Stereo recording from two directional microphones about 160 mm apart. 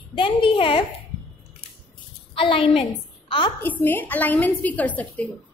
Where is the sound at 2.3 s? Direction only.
35° left (ahead or behind).